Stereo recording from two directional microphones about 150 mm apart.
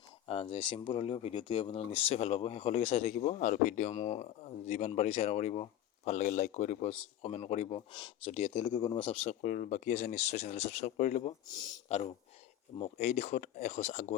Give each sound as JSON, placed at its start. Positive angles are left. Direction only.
{"t": 0.3, "sound": "speech", "side_deg": 40}
{"t": 9.4, "sound": "speech", "side_deg": 65}
{"t": 11.4, "sound": "speech", "side_deg": 25}
{"t": 11.9, "sound": "speech", "side_deg": 45}